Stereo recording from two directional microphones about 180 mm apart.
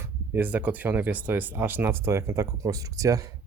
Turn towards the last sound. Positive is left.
turn(degrees=-20)  # may be behind; listen again after turning